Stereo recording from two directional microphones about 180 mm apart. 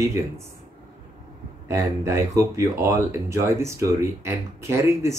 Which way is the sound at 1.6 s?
15° right (ahead or behind).